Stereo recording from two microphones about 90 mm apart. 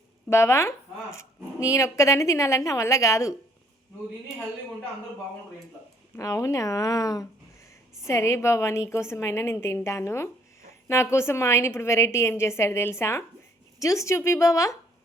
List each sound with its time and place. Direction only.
0.3 s a woman's voice: 30° left (ahead or behind)
6.1 s a woman's voice: 35° left (ahead or behind)